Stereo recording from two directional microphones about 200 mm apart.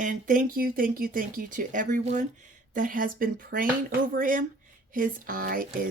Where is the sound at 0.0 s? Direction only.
40° right (ahead or behind).